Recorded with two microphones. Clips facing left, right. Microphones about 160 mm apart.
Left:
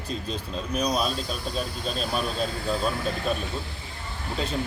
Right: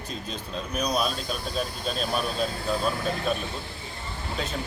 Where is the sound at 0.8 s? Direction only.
Centre (ahead or behind).